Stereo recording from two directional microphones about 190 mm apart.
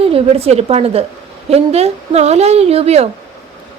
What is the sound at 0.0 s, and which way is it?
A woman's voice, 30° right (ahead or behind).